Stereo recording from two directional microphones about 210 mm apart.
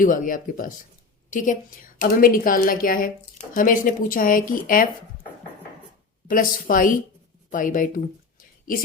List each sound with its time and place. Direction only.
0.0 s a woman's voice: 40° left (ahead or behind)
6.2 s speech: 40° left (ahead or behind)